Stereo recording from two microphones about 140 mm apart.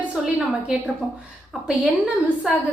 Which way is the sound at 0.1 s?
5° right (ahead or behind).